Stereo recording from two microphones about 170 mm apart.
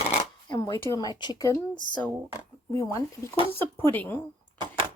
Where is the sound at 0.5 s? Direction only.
20° left (ahead or behind).